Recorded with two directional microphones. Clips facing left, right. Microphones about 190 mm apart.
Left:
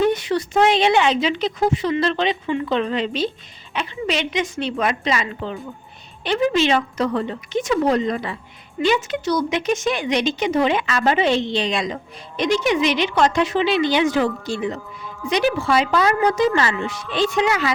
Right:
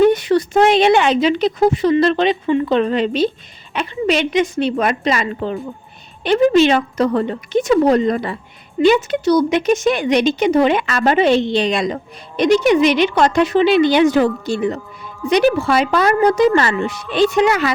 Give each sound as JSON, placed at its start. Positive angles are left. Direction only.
{"t": 0.0, "sound": "speech", "side_deg": -55}
{"t": 1.8, "sound": "a woman's voice", "side_deg": -40}
{"t": 8.8, "sound": "speech", "side_deg": -30}
{"t": 9.3, "sound": "a woman's voice", "side_deg": -60}